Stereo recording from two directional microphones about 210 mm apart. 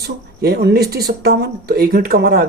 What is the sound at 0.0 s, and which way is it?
Speech, 50° right (ahead or behind).